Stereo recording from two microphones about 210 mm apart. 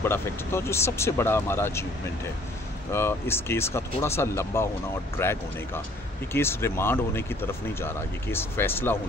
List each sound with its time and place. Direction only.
0.0 s speech: 10° left (ahead or behind)
2.9 s speech: 10° left (ahead or behind)